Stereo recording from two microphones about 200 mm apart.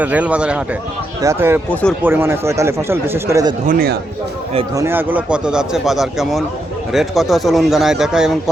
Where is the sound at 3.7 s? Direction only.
50° right (ahead or behind).